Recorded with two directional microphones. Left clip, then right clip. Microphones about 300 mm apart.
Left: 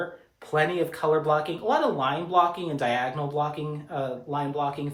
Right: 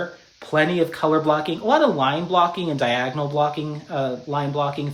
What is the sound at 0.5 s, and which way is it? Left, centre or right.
Speech, right.